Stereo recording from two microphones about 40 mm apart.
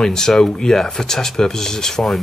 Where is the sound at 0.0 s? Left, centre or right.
Centre.